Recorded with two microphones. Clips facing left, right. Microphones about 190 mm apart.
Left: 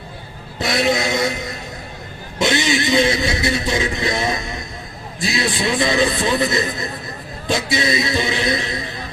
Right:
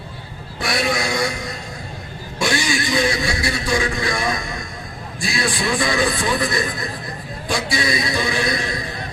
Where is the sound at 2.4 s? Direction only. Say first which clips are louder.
Left 3 dB; 20° left (ahead or behind).